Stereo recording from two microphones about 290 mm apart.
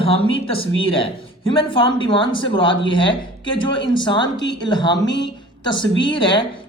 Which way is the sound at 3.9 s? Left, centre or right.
Centre.